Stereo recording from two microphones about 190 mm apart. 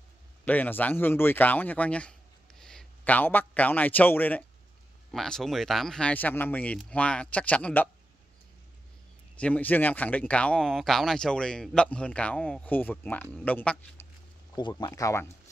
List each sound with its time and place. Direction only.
0.5 s a man's voice: 10° left (ahead or behind)
9.4 s speech: 10° left (ahead or behind)
14.5 s speech: 20° left (ahead or behind)